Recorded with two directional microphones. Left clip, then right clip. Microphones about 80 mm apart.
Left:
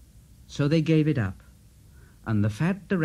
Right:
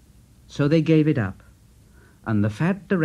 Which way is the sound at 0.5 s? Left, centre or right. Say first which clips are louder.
Right 5 dB; right.